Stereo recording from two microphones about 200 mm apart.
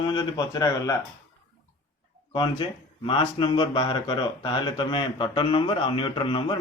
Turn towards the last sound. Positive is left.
turn(degrees=25)  # may be behind; listen again after turning